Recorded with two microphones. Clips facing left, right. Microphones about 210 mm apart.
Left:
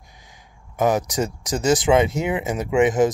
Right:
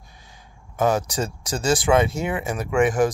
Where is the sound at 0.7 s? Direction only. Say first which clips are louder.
Left 1 dB; 15° left (ahead or behind).